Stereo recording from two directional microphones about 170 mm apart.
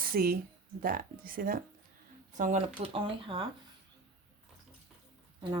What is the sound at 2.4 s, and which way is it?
Speech, 40° right (ahead or behind).